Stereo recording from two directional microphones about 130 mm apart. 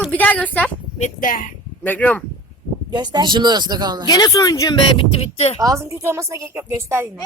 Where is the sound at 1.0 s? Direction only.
90° left.